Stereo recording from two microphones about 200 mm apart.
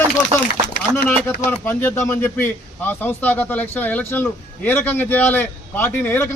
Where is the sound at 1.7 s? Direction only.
10° left (ahead or behind).